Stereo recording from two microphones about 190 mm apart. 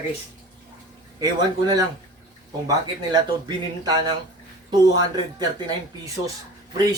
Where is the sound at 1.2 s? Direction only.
20° right (ahead or behind).